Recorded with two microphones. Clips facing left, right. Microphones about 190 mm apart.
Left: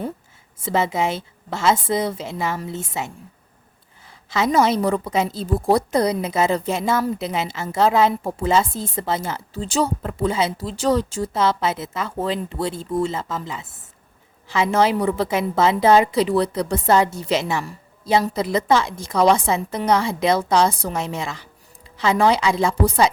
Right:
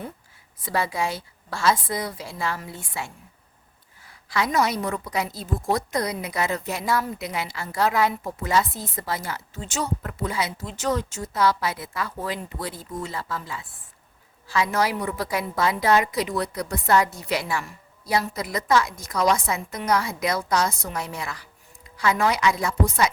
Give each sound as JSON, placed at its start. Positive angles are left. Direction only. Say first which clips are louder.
{"t": 0.6, "sound": "a woman's voice", "louder": "left 5 dB", "side_deg": 20}
{"t": 4.3, "sound": "a woman's voice", "louder": "left 5 dB", "side_deg": 25}